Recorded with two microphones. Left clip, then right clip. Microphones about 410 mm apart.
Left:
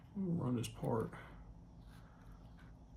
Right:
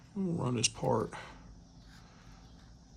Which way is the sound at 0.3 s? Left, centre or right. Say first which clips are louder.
Right 10 dB; centre.